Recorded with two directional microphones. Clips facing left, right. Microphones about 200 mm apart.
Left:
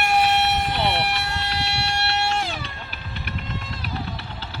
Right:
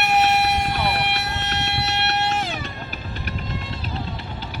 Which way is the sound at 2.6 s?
40° right (ahead or behind).